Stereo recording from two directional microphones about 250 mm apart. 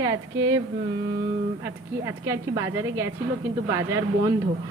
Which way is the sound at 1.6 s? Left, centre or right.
Centre.